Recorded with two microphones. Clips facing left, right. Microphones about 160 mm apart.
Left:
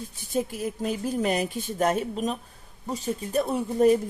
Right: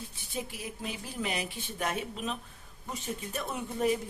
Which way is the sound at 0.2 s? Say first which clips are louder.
Left 11 dB; 45° left (ahead or behind).